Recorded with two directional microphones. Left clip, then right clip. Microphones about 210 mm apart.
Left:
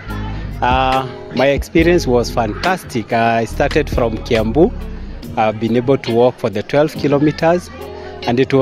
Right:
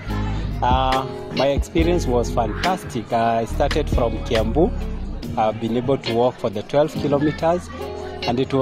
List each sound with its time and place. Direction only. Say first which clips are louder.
0.6 s speech: left 5 dB; 50° left (ahead or behind)